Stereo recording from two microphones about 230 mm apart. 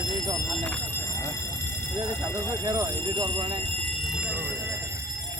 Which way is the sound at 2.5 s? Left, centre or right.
Centre.